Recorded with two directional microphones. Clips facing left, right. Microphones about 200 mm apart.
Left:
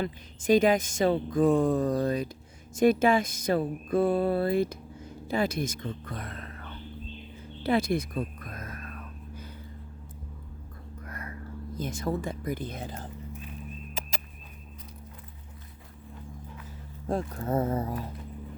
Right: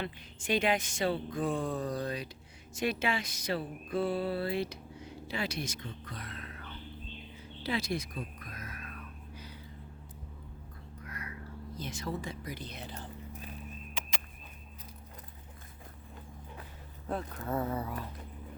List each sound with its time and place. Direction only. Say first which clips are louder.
0.4 s speech: left 8 dB; 40° left (ahead or behind)
7.6 s a sound: left 8 dB; 55° left (ahead or behind)
11.0 s speech: left 4 dB; 50° left (ahead or behind)
17.1 s speech: left 6 dB; 45° left (ahead or behind)